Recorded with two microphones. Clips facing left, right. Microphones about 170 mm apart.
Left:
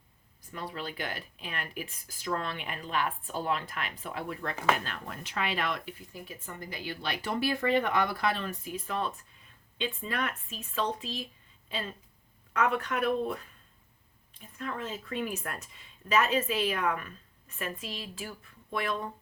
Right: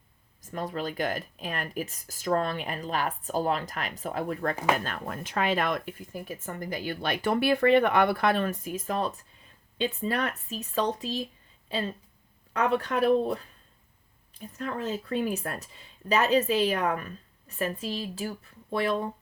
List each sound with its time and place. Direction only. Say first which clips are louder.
0.4 s speech: right 6 dB; 45° right (ahead or behind)
12.5 s speech: right 3 dB; 35° right (ahead or behind)
14.6 s speech: right 5 dB; 40° right (ahead or behind)